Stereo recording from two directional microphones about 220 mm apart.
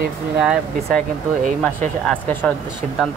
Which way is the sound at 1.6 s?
5° left (ahead or behind).